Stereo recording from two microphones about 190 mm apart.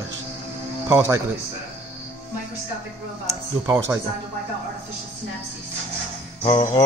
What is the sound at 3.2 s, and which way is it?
Speech, 15° right (ahead or behind).